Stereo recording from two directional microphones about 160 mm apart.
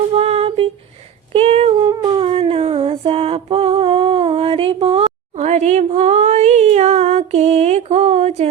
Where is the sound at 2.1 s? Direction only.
35° right (ahead or behind).